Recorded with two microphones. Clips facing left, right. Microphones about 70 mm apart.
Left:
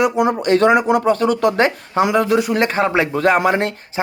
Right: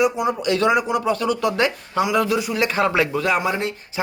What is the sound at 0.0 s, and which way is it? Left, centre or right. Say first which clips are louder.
Speech: left 4 dB; left.